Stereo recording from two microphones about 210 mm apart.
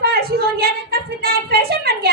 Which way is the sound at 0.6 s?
50° right (ahead or behind).